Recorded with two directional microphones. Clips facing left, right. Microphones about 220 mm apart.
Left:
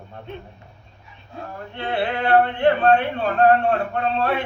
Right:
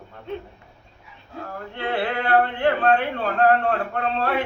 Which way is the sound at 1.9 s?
20° left (ahead or behind).